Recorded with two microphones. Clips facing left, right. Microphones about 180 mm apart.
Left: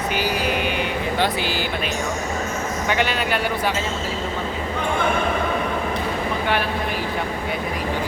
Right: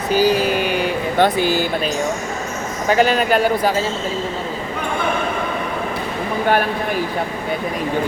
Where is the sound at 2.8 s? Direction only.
40° right (ahead or behind).